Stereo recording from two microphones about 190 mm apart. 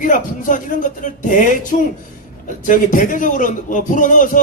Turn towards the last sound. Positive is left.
turn(degrees=45)  # may be behind; listen again after turning